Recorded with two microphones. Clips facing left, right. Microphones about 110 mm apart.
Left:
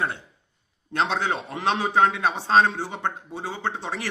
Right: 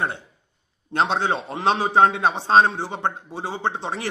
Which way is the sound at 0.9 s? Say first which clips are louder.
Right 3 dB; 25° right (ahead or behind).